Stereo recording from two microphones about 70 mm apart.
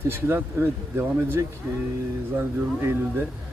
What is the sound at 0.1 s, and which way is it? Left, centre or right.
Speech, right.